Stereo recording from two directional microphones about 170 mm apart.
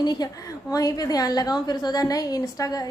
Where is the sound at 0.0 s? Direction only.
25° left (ahead or behind).